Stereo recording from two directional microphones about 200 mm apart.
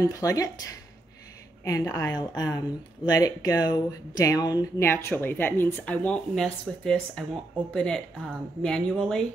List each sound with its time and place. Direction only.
0.0 s speech: 15° left (ahead or behind)
1.6 s speech: 15° left (ahead or behind)